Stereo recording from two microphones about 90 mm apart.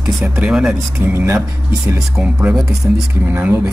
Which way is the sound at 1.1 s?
25° right (ahead or behind).